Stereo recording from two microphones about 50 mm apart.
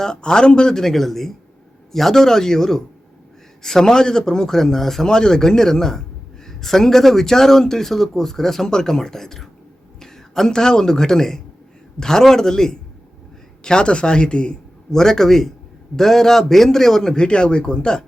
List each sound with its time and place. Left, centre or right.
0.0 s speech: centre